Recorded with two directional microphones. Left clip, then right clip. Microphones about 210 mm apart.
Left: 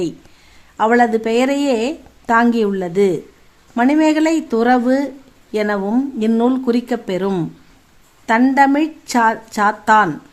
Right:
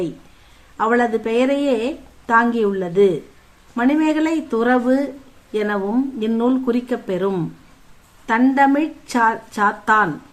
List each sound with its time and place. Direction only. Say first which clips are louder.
0.8 s speech: left 4 dB; 35° left (ahead or behind)